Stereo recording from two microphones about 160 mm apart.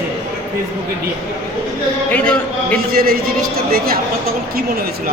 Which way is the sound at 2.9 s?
70° right (ahead or behind).